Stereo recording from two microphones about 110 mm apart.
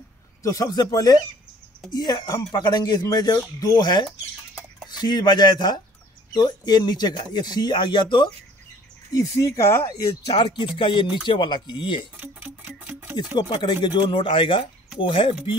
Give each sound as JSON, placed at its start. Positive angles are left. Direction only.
{"t": 0.4, "sound": "speech", "side_deg": 30}
{"t": 9.1, "sound": "speech", "side_deg": 30}
{"t": 10.3, "sound": "speech", "side_deg": 45}
{"t": 12.2, "sound": "music", "side_deg": -15}
{"t": 13.1, "sound": "speech", "side_deg": 40}